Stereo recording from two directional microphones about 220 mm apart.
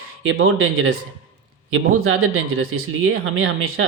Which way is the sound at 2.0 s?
65° right (ahead or behind).